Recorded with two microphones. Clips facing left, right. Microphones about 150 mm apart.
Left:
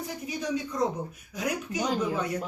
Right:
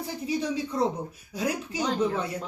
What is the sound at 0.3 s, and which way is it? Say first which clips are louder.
A woman's voice: right 3 dB; 30° right (ahead or behind).